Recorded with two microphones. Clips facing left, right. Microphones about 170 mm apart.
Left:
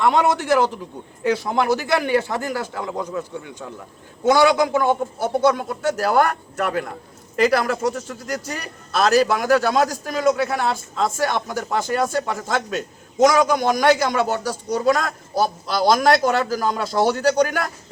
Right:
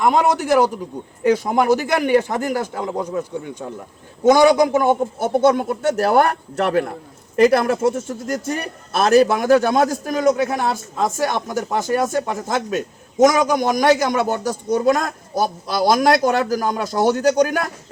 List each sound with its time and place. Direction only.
0.0 s a man's voice: 15° right (ahead or behind)
9.5 s a man's voice: 20° right (ahead or behind)